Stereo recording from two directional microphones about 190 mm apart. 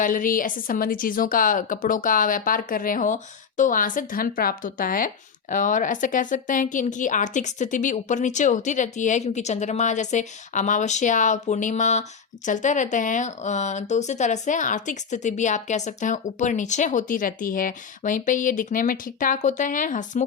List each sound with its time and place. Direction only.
0.0 s a woman's voice: 45° left (ahead or behind)